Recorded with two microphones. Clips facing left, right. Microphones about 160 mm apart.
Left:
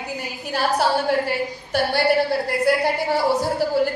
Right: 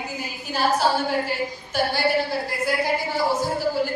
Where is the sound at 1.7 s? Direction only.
65° left (ahead or behind).